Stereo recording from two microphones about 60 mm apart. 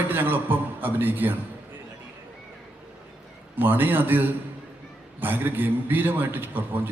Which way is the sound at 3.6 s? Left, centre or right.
Right.